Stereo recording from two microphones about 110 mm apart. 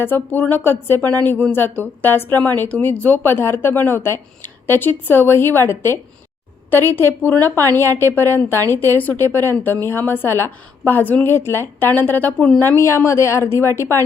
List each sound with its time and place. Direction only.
0.0 s a woman's voice: 20° left (ahead or behind)
7.5 s a woman's voice: 30° right (ahead or behind)
7.8 s a woman's voice: 20° left (ahead or behind)